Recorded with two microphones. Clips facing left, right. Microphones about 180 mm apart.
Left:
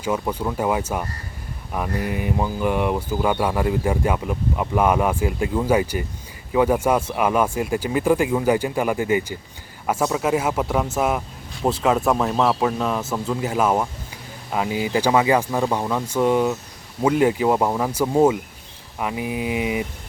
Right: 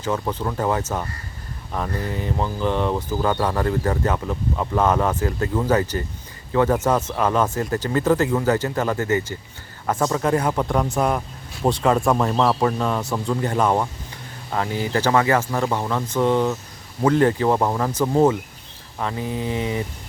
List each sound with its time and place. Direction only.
0.0 s speech: 10° left (ahead or behind)